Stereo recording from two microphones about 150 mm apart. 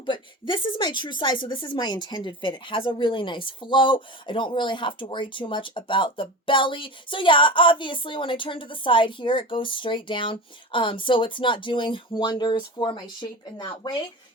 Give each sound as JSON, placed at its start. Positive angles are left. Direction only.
{"t": 0.0, "sound": "a woman's voice", "side_deg": 35}